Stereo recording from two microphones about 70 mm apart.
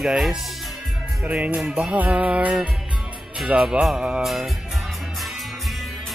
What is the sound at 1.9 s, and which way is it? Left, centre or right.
Music, right.